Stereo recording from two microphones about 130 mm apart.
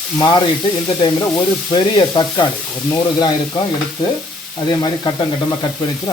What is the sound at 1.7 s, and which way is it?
Frying, 35° left (ahead or behind).